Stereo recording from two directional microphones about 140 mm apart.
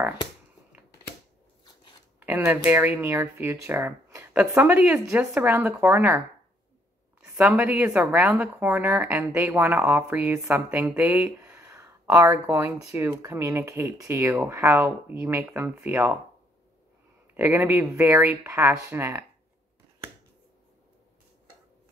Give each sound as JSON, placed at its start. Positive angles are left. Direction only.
{"t": 2.1, "sound": "speech", "side_deg": -15}
{"t": 7.2, "sound": "speech", "side_deg": -10}
{"t": 17.3, "sound": "speech", "side_deg": -15}